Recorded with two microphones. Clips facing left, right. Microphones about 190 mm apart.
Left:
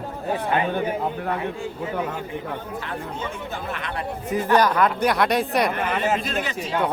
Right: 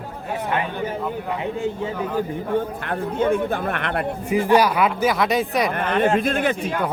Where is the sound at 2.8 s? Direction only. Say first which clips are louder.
Right 9 dB; 55° right (ahead or behind).